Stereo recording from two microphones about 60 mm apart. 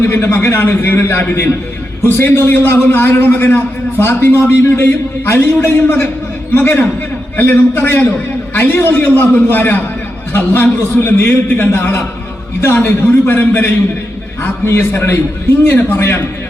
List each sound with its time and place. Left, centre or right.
0.1 s a man's voice: left